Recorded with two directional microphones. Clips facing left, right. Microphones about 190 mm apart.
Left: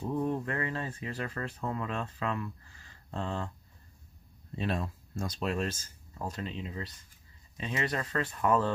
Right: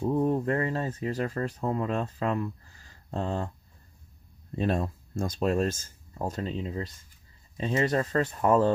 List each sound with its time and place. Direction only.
0.3 s speech: 40° right (ahead or behind)
2.8 s a sound: 45° right (ahead or behind)
4.6 s speech: 45° right (ahead or behind)
7.5 s speech: 30° right (ahead or behind)
8.0 s speech: 45° right (ahead or behind)